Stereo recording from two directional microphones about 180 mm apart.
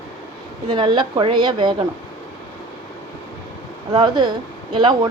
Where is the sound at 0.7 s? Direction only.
25° right (ahead or behind).